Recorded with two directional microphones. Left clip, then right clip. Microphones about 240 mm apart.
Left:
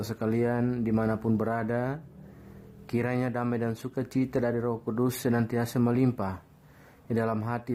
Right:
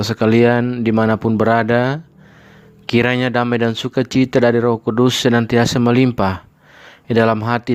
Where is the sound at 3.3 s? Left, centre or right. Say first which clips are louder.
Right 14 dB; right.